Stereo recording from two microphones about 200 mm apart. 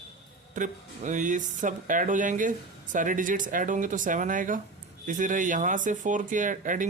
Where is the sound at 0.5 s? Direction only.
40° right (ahead or behind).